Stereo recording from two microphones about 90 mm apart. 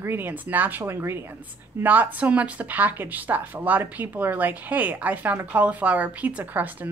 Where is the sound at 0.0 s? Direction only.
20° right (ahead or behind).